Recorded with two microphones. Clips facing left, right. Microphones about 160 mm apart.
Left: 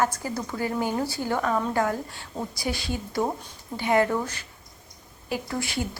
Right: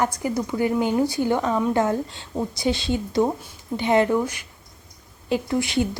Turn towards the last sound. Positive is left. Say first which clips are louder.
# right 7 dB
turn(degrees=-20)  # may be behind; listen again after turning